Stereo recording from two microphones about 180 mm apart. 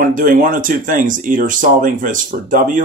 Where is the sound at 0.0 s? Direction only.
50° right (ahead or behind).